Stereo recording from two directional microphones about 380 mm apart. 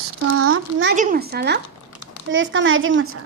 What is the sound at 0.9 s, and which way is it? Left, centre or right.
Speech, right.